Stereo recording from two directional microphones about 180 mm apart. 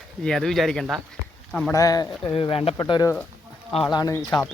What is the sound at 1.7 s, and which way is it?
Speech, 20° left (ahead or behind).